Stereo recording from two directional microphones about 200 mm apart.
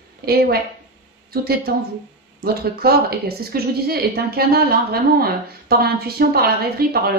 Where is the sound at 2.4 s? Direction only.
50° right (ahead or behind).